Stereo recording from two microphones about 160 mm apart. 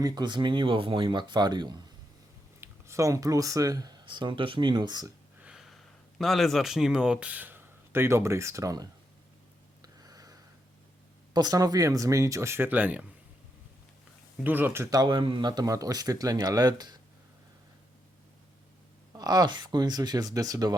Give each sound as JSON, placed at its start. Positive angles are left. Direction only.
{"t": 0.0, "sound": "speech", "side_deg": -25}
{"t": 5.4, "sound": "speech", "side_deg": -5}
{"t": 9.8, "sound": "a sound", "side_deg": -25}
{"t": 11.3, "sound": "speech", "side_deg": -25}
{"t": 14.4, "sound": "speech", "side_deg": -10}
{"t": 19.1, "sound": "speech", "side_deg": -25}